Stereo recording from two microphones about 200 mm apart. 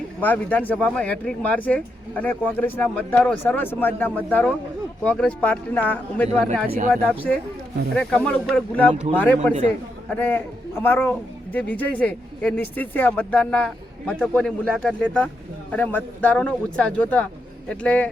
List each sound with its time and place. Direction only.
0.2 s a man's voice: 10° left (ahead or behind)
6.7 s speech: 40° right (ahead or behind)
6.9 s a man's voice: 5° left (ahead or behind)